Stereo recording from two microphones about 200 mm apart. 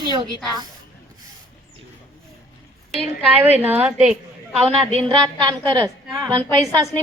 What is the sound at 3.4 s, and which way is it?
A woman's voice, 10° right (ahead or behind).